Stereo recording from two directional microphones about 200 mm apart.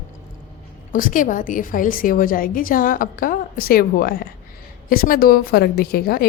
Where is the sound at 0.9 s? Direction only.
40° left (ahead or behind).